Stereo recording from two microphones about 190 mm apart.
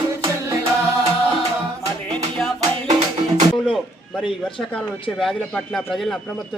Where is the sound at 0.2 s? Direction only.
25° right (ahead or behind).